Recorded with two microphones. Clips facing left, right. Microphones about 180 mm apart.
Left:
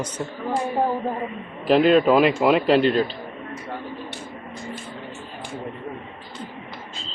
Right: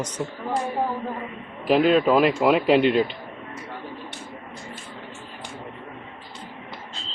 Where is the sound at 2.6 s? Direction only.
15° right (ahead or behind).